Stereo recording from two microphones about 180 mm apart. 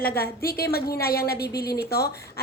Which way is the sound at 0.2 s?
55° left (ahead or behind).